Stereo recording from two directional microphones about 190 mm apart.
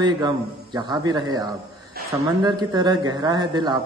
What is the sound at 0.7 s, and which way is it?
Speech, 20° right (ahead or behind).